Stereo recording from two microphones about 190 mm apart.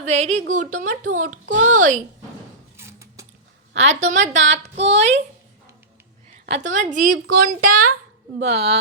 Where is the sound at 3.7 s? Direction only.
35° right (ahead or behind).